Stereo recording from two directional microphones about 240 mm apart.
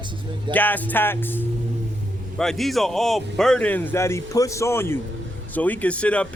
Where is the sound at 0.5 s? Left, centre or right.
Centre.